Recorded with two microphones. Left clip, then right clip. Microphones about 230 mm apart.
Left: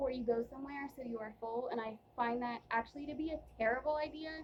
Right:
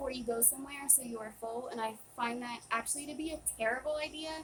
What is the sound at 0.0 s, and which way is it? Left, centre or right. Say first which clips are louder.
A woman's voice: even; right.